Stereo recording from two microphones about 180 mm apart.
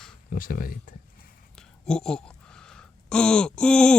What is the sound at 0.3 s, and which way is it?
Speech, 50° left (ahead or behind).